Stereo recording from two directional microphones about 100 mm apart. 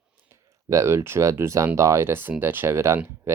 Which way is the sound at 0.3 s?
30° right (ahead or behind).